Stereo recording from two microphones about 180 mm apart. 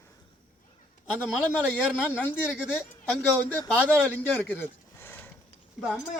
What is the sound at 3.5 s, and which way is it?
A man's voice, 10° left (ahead or behind).